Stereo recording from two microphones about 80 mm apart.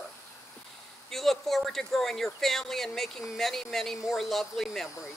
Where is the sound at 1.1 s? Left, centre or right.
Centre.